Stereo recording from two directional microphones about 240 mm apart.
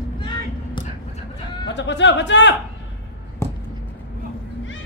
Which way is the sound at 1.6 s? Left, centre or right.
Left.